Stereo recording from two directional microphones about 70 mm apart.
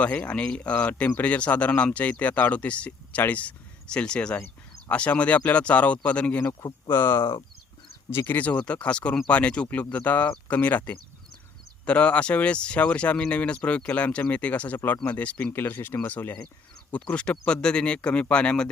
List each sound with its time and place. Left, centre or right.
0.0 s speech: left
6.8 s speech: left
8.3 s speech: left
15.5 s speech: left; by 18.7 s centre